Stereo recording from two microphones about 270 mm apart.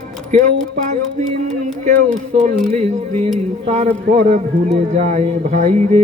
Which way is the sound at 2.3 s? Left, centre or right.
Right.